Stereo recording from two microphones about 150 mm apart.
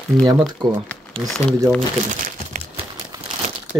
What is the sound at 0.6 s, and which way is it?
Speech, 30° right (ahead or behind).